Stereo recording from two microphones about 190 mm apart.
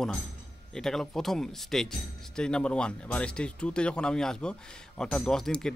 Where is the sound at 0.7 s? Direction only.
Centre (ahead or behind).